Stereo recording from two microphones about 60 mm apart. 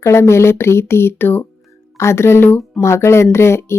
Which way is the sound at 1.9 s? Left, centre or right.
Left.